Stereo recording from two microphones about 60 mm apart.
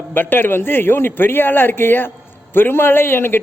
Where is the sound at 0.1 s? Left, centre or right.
Left.